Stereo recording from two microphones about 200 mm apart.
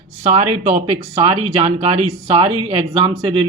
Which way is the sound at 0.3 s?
30° right (ahead or behind).